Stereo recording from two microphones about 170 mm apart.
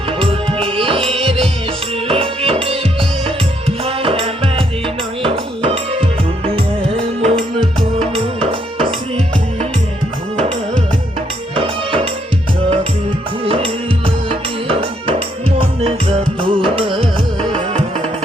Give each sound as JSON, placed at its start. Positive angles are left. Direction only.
{"t": 0.2, "sound": "music", "side_deg": -30}
{"t": 3.8, "sound": "music", "side_deg": -35}
{"t": 7.2, "sound": "music", "side_deg": -40}
{"t": 11.5, "sound": "music", "side_deg": -30}
{"t": 13.4, "sound": "music", "side_deg": -35}